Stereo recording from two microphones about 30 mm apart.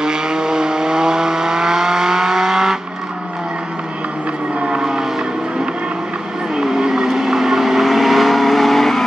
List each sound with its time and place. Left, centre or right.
0.0 s vehicle: right
6.5 s vehicle: centre